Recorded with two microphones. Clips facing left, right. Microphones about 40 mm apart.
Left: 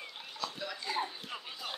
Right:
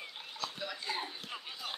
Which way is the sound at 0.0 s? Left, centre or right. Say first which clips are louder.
Left 1 dB; centre.